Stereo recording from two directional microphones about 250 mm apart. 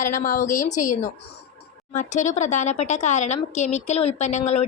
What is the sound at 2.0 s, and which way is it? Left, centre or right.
Speech, left.